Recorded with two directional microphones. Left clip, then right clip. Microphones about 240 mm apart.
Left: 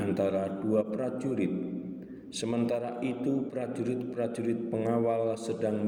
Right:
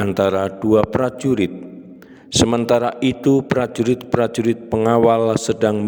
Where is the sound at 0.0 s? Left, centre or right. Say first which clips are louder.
Right 12 dB; right.